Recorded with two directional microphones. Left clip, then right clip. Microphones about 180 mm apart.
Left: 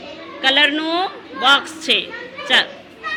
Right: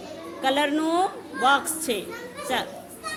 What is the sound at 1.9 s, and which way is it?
Speech, 15° right (ahead or behind).